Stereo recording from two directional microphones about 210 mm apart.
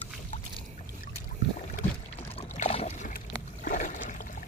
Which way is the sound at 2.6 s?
30° left (ahead or behind).